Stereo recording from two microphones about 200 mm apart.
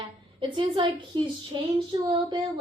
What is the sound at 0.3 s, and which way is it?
Speech, 25° right (ahead or behind).